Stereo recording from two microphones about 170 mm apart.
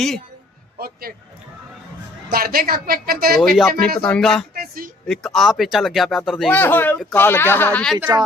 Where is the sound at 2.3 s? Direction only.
60° right (ahead or behind).